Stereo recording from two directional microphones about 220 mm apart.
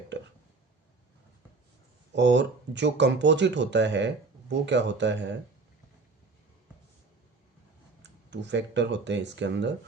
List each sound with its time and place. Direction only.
2.1 s speech: 55° right (ahead or behind)
8.3 s speech: 55° right (ahead or behind)